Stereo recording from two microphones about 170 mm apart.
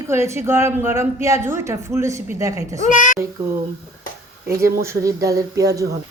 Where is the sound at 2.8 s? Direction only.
50° left (ahead or behind).